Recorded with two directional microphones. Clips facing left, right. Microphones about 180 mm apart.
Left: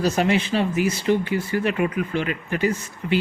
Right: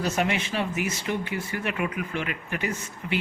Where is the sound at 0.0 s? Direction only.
35° left (ahead or behind).